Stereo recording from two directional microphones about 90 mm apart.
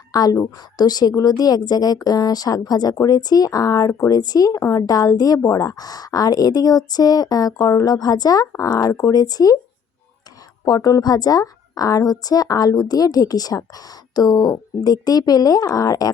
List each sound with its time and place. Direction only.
0.1 s a woman's voice: 45° left (ahead or behind)
10.7 s a woman's voice: 40° left (ahead or behind)